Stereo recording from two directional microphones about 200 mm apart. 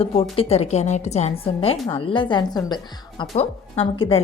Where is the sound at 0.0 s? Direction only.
30° left (ahead or behind).